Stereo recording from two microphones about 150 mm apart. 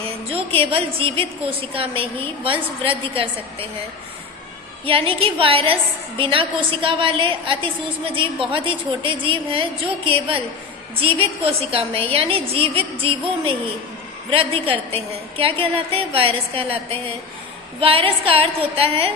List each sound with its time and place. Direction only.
0.3 s a woman's voice: 40° right (ahead or behind)
4.9 s a woman's voice: 40° right (ahead or behind)